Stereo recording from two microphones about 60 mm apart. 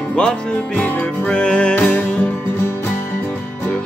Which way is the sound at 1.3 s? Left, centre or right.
Centre.